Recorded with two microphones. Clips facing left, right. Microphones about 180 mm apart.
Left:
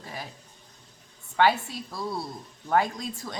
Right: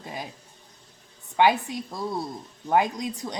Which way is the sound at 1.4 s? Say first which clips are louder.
Right 2 dB; 15° right (ahead or behind).